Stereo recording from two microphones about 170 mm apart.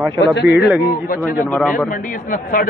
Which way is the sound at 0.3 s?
85° left.